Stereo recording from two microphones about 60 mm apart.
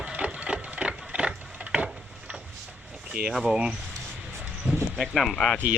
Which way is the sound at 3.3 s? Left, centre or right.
Centre.